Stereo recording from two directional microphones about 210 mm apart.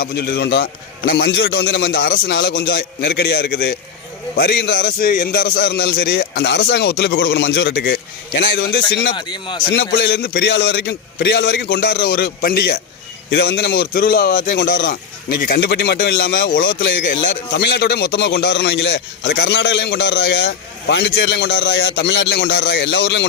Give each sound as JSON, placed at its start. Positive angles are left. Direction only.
{"t": 0.0, "sound": "a man's voice", "side_deg": 50}
{"t": 2.2, "sound": "a man's voice", "side_deg": 50}
{"t": 9.1, "sound": "speech", "side_deg": 20}
{"t": 9.7, "sound": "a man's voice", "side_deg": 55}
{"t": 17.6, "sound": "a man's voice", "side_deg": 50}